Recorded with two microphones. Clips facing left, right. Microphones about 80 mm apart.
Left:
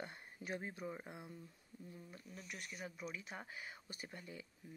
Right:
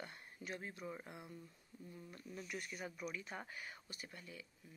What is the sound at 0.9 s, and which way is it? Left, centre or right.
Speech, left.